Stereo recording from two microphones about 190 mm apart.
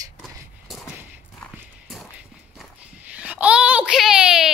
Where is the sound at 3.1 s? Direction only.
5° right (ahead or behind).